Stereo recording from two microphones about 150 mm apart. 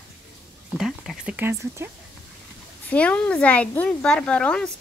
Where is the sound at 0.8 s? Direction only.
Centre (ahead or behind).